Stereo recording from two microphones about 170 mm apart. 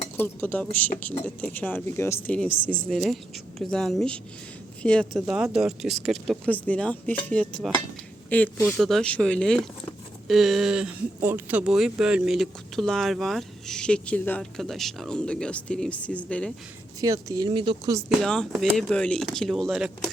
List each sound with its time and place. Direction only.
0.2 s speech: 10° left (ahead or behind)
17.0 s speech: 20° right (ahead or behind)
18.2 s speech: centre (ahead or behind)